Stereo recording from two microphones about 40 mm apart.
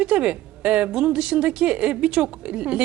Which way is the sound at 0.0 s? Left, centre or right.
Right.